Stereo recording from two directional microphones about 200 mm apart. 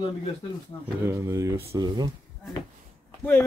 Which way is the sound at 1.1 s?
15° right (ahead or behind).